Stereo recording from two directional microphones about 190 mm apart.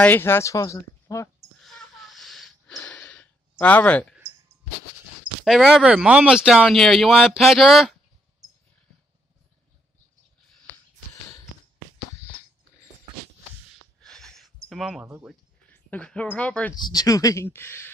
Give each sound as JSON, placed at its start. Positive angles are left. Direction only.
{"t": 0.0, "sound": "speech", "side_deg": 10}
{"t": 1.6, "sound": "a sound", "side_deg": 0}
{"t": 5.4, "sound": "speech", "side_deg": 0}
{"t": 14.0, "sound": "a sound", "side_deg": 0}
{"t": 15.7, "sound": "a woman's voice", "side_deg": 5}
{"t": 16.7, "sound": "speech", "side_deg": 20}